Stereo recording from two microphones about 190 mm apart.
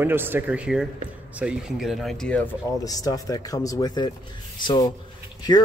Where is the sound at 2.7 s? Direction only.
20° left (ahead or behind).